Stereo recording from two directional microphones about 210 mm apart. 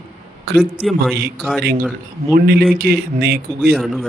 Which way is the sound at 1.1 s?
45° right (ahead or behind).